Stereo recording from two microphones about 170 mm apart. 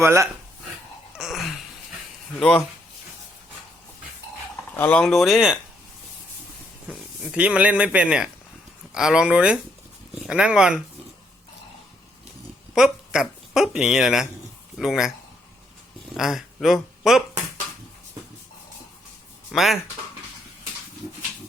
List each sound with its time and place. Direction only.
0.0 s speech: 15° right (ahead or behind)
1.1 s a sound: centre (ahead or behind)
2.4 s speech: 5° left (ahead or behind)
4.8 s speech: 5° left (ahead or behind)
6.8 s speech: 5° right (ahead or behind)
12.7 s speech: 5° right (ahead or behind)
16.1 s speech: centre (ahead or behind)
19.5 s speech: centre (ahead or behind)